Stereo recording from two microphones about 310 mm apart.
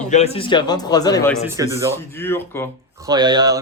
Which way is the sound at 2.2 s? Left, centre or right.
Centre.